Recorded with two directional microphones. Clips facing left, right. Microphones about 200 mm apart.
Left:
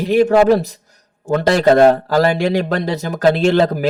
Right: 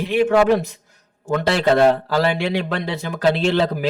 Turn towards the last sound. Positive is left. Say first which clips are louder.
# left 5 dB
turn(degrees=45)  # may be behind; listen again after turning